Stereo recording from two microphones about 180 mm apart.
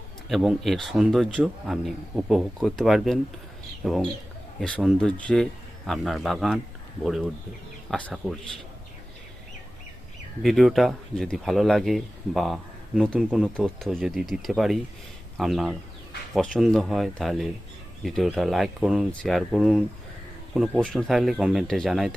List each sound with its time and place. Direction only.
0.3 s speech: centre (ahead or behind)
10.4 s speech: centre (ahead or behind)